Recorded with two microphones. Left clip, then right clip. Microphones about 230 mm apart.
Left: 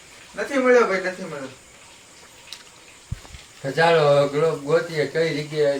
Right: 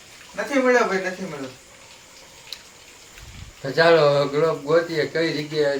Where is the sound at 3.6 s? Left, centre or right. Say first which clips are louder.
Right 1 dB; centre.